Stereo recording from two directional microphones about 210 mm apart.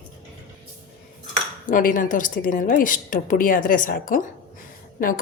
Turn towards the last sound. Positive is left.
turn(degrees=40)  # may be behind; listen again after turning